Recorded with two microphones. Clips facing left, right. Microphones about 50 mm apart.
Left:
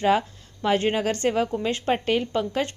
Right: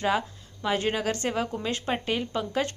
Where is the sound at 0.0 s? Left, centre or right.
Left.